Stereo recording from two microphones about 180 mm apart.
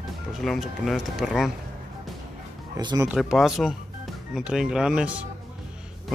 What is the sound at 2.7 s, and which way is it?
Speech, 25° right (ahead or behind).